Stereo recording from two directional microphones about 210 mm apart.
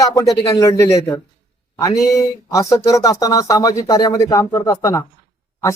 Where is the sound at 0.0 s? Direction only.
15° left (ahead or behind).